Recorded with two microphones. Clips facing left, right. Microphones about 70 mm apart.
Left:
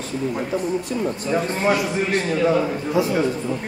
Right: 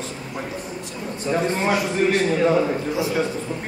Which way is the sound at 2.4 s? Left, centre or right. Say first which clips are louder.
Even; centre.